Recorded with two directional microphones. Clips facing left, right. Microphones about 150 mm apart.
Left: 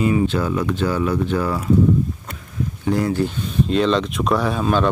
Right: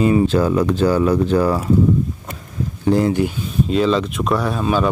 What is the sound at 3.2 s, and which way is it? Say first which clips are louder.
Speech: right 1 dB; 5° right (ahead or behind).